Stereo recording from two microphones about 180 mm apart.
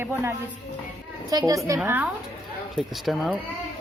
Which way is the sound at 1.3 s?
20° right (ahead or behind).